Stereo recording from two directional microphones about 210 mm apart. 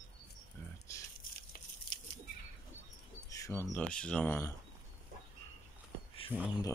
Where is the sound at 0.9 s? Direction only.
15° left (ahead or behind).